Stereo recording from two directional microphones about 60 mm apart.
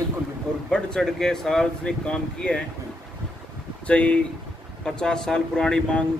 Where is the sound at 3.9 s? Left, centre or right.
Left.